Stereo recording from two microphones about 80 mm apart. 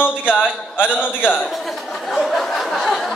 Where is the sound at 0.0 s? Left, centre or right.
Left.